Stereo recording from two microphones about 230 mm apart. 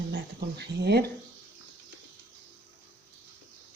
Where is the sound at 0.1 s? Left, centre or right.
Right.